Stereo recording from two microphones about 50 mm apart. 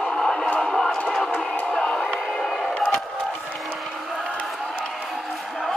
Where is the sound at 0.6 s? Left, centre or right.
Centre.